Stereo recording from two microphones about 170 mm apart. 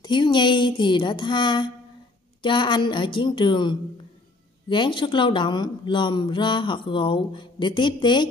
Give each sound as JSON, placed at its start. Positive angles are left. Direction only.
{"t": 0.0, "sound": "speech", "side_deg": 25}